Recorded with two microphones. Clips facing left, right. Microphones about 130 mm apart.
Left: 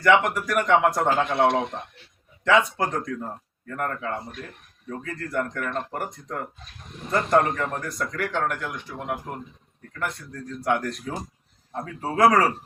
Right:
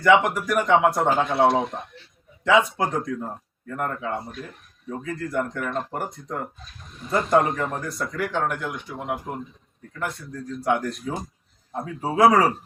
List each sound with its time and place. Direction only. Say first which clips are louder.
0.3 s speech: right 1 dB; 5° right (ahead or behind)
1.0 s a man's voice: right 1 dB; 15° right (ahead or behind)
8.6 s speech: right 2 dB; 15° right (ahead or behind)
10.7 s a man's voice: right 1 dB; 10° right (ahead or behind)
11.9 s a man's voice: right 2 dB; 20° right (ahead or behind)
12.2 s speech: right 2 dB; 5° right (ahead or behind)